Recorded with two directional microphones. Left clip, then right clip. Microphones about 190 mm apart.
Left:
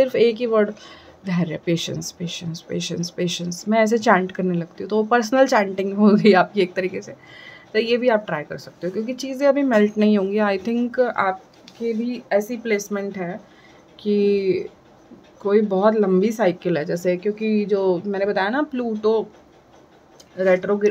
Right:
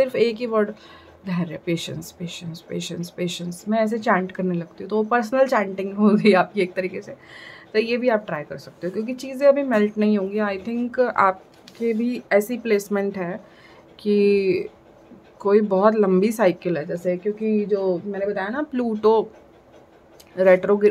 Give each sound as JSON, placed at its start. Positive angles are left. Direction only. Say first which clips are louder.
{"t": 0.0, "sound": "speech", "louder": "left 3 dB", "side_deg": 10}
{"t": 10.9, "sound": "speech", "louder": "even", "side_deg": 0}
{"t": 11.8, "sound": "speech", "louder": "right 1 dB", "side_deg": -25}
{"t": 16.8, "sound": "speech", "louder": "left 2 dB", "side_deg": 10}
{"t": 18.7, "sound": "speech", "louder": "right 2 dB", "side_deg": -10}
{"t": 20.3, "sound": "speech", "louder": "right 3 dB", "side_deg": -20}